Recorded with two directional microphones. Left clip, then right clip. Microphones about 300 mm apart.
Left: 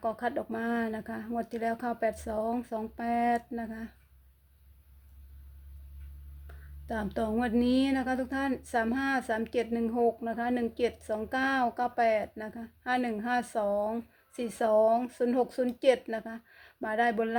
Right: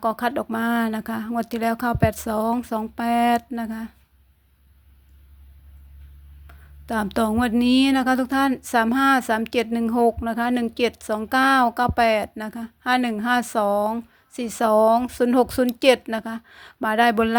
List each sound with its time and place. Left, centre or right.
0.0 s speech: right
6.8 s speech: right